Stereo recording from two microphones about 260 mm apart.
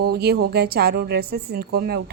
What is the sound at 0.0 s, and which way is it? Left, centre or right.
A woman's voice, right.